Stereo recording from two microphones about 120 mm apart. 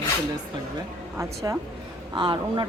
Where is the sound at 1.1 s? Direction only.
25° right (ahead or behind).